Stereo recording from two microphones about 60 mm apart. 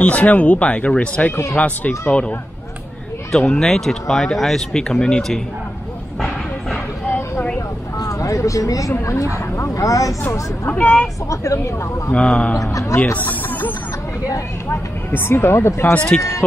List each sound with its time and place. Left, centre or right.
0.0 s speech: left
3.3 s speech: centre
7.1 s vehicle: left
8.0 s speech: left
9.0 s speech: left
10.7 s speech: left
11.2 s speech: left
12.1 s speech: centre
12.9 s music: left
14.7 s speech: left
15.9 s speech: left